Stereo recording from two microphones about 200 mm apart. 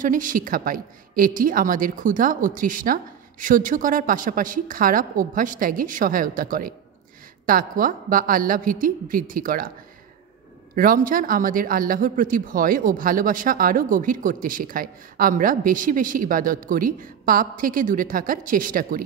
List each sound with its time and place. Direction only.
0.0 s a man's voice: 40° right (ahead or behind)
10.7 s a man's voice: 45° right (ahead or behind)